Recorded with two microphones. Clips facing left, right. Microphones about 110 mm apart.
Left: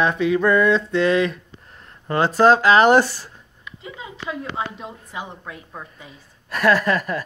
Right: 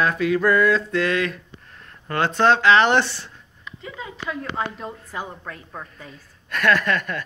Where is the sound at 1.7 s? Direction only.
20° left (ahead or behind).